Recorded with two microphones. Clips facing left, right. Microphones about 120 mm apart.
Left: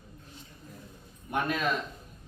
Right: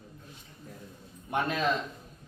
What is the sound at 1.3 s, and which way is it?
Speech, 25° right (ahead or behind).